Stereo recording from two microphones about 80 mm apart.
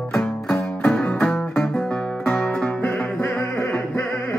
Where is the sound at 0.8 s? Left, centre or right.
Centre.